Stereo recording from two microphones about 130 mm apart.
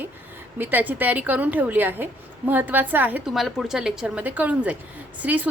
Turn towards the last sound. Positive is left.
turn(degrees=-10)  # may be behind; listen again after turning